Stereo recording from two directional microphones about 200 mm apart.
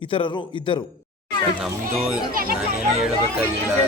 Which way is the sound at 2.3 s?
45° right (ahead or behind).